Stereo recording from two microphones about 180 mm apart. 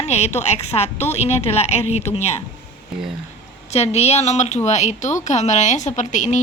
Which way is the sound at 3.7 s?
35° left (ahead or behind).